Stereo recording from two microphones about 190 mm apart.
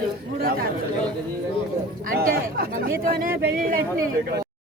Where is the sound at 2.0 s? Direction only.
50° right (ahead or behind).